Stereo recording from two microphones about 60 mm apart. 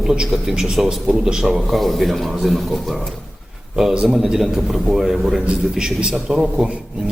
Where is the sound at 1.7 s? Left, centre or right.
Centre.